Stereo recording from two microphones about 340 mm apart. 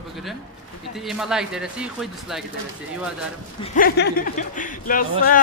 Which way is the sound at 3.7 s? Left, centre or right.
Left.